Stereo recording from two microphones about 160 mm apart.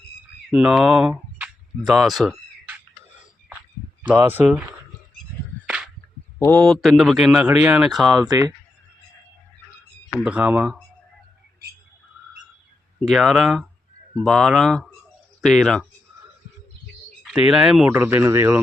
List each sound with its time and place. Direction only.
0.5 s speech: 5° right (ahead or behind)
1.9 s a sound: centre (ahead or behind)
4.0 s speech: 10° right (ahead or behind)
5.6 s a sound: 5° right (ahead or behind)
6.6 s speech: centre (ahead or behind)
8.3 s speech: 25° right (ahead or behind)
10.2 s speech: 10° right (ahead or behind)
13.1 s speech: centre (ahead or behind)
17.2 s speech: 5° right (ahead or behind)